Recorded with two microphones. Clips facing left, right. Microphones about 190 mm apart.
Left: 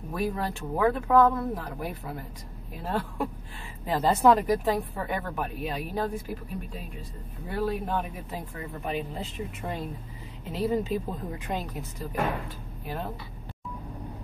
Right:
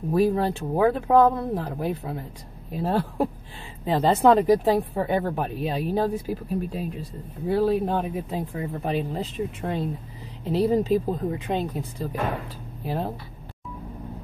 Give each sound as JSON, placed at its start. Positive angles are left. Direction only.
{"t": 0.1, "sound": "speech", "side_deg": -30}